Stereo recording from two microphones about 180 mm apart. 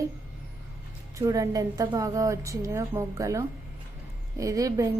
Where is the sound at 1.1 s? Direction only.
20° right (ahead or behind).